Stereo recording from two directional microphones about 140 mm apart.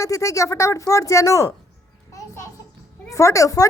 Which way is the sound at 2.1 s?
20° left (ahead or behind).